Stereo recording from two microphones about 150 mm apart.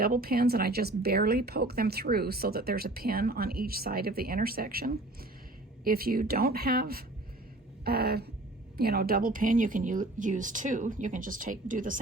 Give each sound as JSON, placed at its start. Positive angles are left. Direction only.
{"t": 0.0, "sound": "speech", "side_deg": -85}
{"t": 5.8, "sound": "a woman's voice", "side_deg": -75}